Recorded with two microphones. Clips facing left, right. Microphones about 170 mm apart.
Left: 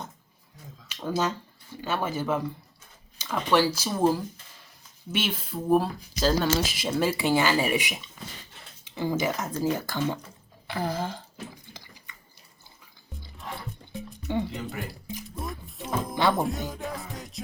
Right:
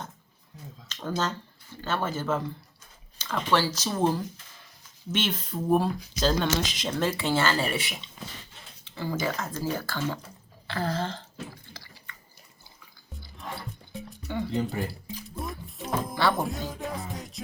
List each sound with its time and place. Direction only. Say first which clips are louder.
0.9 s speech: left 2 dB; 10° left (ahead or behind)
11.7 s a sound: even; 20° left (ahead or behind)
14.3 s speech: left 3 dB; 20° left (ahead or behind)
14.8 s speech: right 4 dB; 30° right (ahead or behind)
15.4 s music: right 2 dB; centre (ahead or behind)
16.3 s speech: left 2 dB; centre (ahead or behind)
16.7 s music: right 1 dB; centre (ahead or behind)